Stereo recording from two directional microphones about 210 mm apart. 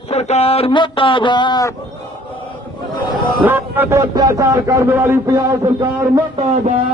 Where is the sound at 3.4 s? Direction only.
10° right (ahead or behind).